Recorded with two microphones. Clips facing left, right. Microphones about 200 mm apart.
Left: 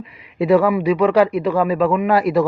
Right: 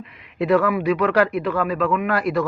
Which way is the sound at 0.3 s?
5° left (ahead or behind).